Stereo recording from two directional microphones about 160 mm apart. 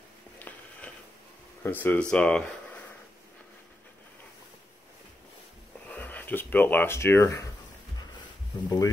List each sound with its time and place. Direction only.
0.4 s a sound: 10° left (ahead or behind)
1.6 s speech: 10° left (ahead or behind)
5.9 s speech: 10° left (ahead or behind)
8.6 s speech: 20° left (ahead or behind)